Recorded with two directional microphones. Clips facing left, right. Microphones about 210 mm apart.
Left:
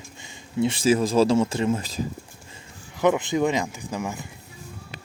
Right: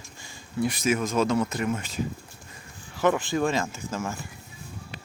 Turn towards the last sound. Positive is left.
turn(degrees=15)  # may be behind; listen again after turning